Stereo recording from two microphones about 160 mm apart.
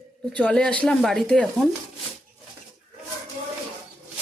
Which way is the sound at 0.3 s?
5° left (ahead or behind).